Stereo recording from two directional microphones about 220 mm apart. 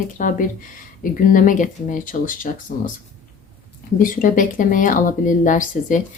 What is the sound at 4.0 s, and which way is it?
Speech, 35° left (ahead or behind).